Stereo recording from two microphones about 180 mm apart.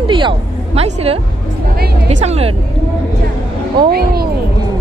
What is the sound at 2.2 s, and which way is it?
Speech, 35° right (ahead or behind).